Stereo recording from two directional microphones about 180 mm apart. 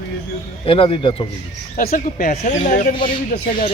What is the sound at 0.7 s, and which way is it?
Speech, 30° left (ahead or behind).